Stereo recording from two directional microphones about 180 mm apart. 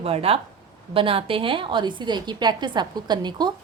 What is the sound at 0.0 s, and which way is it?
A woman's voice, 35° right (ahead or behind).